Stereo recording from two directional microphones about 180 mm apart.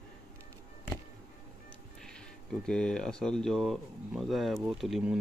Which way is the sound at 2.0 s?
5° left (ahead or behind).